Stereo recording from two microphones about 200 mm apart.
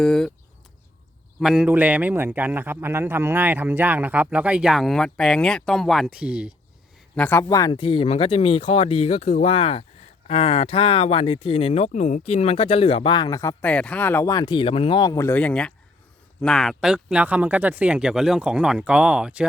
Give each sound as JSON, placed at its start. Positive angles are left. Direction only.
{"t": 0.0, "sound": "speech", "side_deg": 0}
{"t": 1.4, "sound": "a man's voice", "side_deg": -5}
{"t": 7.2, "sound": "speech", "side_deg": 10}